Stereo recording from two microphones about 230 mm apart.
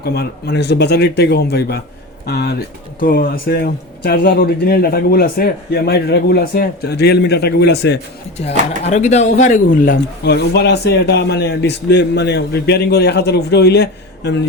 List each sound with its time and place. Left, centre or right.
0.0 s a man's voice: left
8.9 s a man's voice: left